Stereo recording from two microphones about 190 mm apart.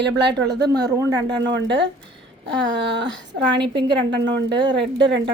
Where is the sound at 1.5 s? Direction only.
70° right (ahead or behind).